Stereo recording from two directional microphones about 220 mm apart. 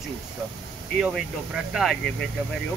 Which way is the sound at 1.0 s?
Centre (ahead or behind).